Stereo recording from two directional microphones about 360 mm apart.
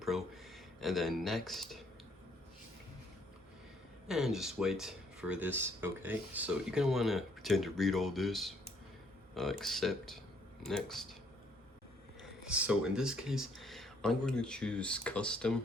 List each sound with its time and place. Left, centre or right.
0.0 s speech: centre
4.1 s speech: centre
12.2 s speech: centre